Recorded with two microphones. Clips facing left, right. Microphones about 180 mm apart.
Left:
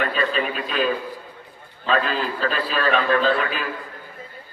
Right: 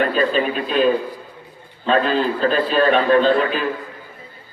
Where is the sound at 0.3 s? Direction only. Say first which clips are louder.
Right 5 dB; 35° right (ahead or behind).